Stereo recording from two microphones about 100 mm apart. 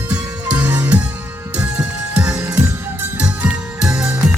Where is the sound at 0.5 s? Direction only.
15° right (ahead or behind).